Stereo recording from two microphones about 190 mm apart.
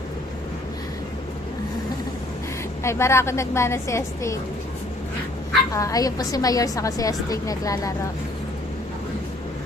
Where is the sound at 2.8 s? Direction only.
15° left (ahead or behind).